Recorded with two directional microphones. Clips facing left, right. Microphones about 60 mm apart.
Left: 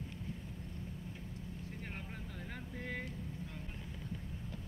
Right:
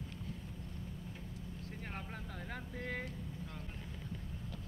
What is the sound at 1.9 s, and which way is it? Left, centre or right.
Speech, centre.